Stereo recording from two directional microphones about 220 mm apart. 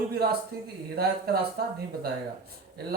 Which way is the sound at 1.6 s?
45° right (ahead or behind).